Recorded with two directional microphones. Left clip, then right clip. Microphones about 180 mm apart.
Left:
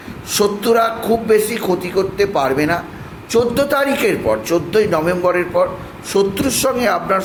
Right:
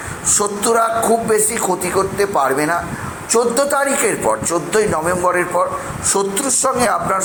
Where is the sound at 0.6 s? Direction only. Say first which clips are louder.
Right 3 dB; 30° left (ahead or behind).